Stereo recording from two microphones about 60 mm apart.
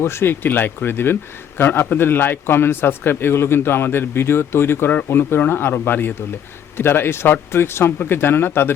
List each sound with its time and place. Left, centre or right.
0.0 s a man's voice: left